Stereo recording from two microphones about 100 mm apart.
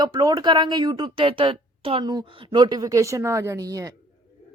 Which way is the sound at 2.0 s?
50° right (ahead or behind).